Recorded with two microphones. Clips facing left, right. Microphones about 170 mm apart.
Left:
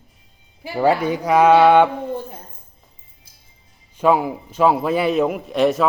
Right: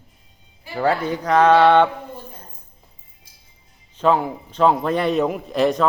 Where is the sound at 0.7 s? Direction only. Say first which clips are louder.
Left 3 dB; 10° left (ahead or behind).